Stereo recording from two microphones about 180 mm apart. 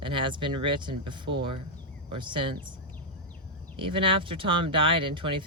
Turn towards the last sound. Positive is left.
turn(degrees=-30)  # may be behind; listen again after turning